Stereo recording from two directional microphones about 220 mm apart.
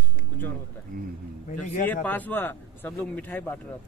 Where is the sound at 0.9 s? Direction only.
40° right (ahead or behind).